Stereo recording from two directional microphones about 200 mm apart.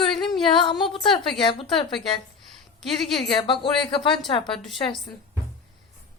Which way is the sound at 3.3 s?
25° left (ahead or behind).